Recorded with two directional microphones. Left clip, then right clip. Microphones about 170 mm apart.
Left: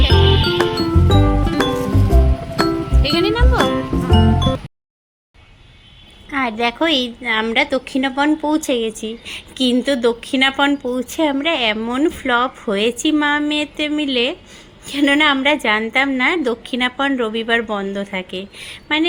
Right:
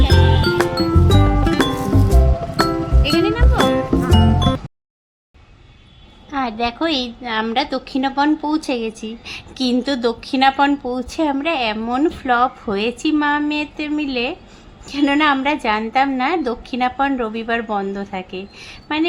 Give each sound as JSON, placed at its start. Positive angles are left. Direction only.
{"t": 0.0, "sound": "music", "side_deg": 0}
{"t": 3.2, "sound": "music", "side_deg": 20}
{"t": 3.6, "sound": "music", "side_deg": 0}
{"t": 6.3, "sound": "a woman's voice", "side_deg": 5}